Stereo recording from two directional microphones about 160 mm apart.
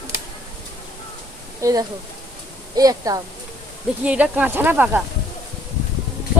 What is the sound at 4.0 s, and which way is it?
Speech, 5° right (ahead or behind).